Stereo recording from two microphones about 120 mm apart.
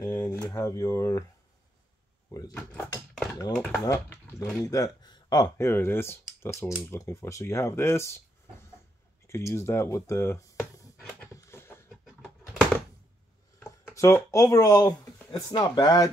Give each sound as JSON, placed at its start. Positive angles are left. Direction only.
{"t": 0.0, "sound": "speech", "side_deg": 25}
{"t": 2.5, "sound": "speech", "side_deg": 10}
{"t": 4.1, "sound": "speech", "side_deg": 25}
{"t": 5.6, "sound": "speech", "side_deg": 20}
{"t": 9.3, "sound": "speech", "side_deg": 25}
{"t": 11.3, "sound": "a sound", "side_deg": 20}
{"t": 12.0, "sound": "a sound", "side_deg": 0}
{"t": 13.6, "sound": "speech", "side_deg": 25}